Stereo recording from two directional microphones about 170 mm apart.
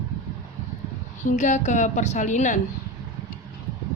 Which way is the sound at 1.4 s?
45° left (ahead or behind).